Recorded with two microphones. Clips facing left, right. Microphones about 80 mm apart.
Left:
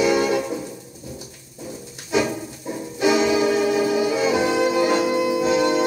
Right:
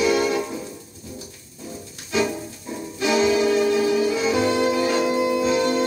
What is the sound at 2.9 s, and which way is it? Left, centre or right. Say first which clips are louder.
Music: left 1 dB; centre.